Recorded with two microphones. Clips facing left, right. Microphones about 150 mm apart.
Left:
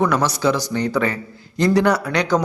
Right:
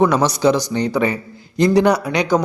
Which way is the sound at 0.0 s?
20° right (ahead or behind).